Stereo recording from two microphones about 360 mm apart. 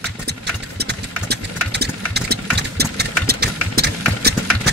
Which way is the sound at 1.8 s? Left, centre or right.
Right.